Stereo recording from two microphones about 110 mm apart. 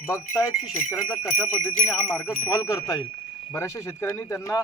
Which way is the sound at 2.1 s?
25° left (ahead or behind).